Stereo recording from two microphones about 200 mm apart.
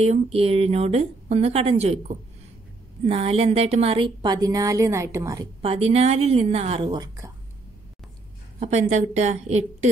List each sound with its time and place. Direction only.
0.0 s a woman's voice: 30° right (ahead or behind)
5.6 s a woman's voice: 30° right (ahead or behind)
8.5 s a woman's voice: 35° right (ahead or behind)